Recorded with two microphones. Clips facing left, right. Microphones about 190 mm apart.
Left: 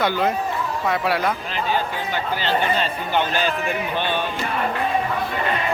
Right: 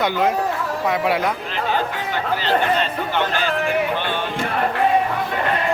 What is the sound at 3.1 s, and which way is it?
Speech, 15° left (ahead or behind).